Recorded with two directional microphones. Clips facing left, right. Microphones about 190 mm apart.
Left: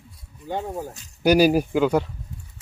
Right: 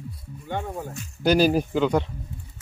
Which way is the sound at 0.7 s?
10° left (ahead or behind).